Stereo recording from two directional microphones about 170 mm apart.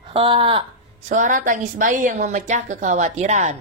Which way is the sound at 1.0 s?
45° right (ahead or behind).